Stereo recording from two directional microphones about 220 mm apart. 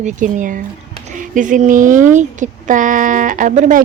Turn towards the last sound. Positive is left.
turn(degrees=-35)  # may be behind; listen again after turning